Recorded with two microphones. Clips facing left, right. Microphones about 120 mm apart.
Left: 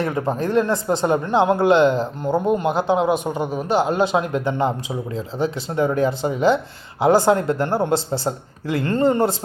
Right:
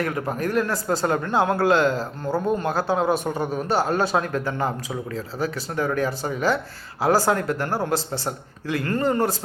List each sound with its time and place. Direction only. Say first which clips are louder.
0.0 s speech: left 3 dB; 25° left (ahead or behind)